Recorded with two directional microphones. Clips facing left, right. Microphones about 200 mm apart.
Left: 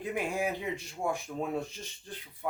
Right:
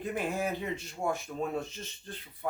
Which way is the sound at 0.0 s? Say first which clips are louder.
Even; 15° left (ahead or behind).